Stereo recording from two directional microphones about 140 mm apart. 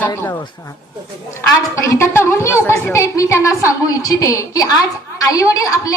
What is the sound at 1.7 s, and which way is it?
A woman's voice, 20° left (ahead or behind).